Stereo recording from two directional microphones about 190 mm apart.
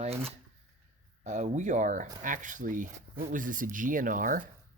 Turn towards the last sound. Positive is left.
turn(degrees=-45)  # may be behind; listen again after turning